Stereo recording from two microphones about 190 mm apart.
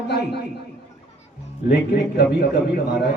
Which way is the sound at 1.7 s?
60° left (ahead or behind).